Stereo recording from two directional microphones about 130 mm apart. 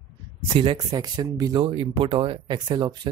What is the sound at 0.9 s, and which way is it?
Speech, 30° right (ahead or behind).